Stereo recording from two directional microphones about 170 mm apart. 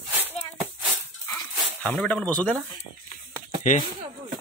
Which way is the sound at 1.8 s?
10° left (ahead or behind).